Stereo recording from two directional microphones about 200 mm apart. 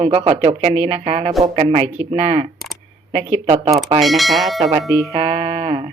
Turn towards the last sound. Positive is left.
turn(degrees=-25)  # may be behind; listen again after turning